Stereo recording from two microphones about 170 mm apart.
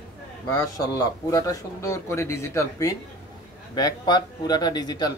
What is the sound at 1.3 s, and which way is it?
Speech, 20° left (ahead or behind).